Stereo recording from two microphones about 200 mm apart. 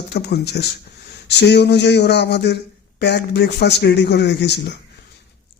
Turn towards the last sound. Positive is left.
turn(degrees=60)  # may be behind; listen again after turning